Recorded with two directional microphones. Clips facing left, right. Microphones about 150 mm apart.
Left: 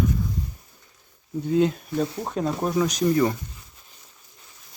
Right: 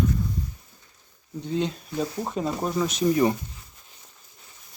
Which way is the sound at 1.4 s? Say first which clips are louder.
Left 6 dB; 5° left (ahead or behind).